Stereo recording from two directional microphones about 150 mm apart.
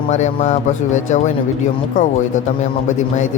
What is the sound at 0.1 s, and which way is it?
Speech, 50° left (ahead or behind).